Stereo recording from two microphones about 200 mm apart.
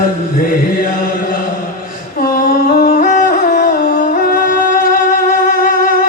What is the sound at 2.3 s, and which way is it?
Music, 45° left (ahead or behind).